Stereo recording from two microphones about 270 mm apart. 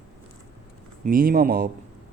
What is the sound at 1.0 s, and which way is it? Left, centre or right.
Speech, right.